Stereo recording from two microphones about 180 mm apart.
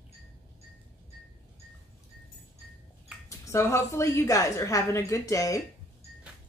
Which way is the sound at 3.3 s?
15° left (ahead or behind).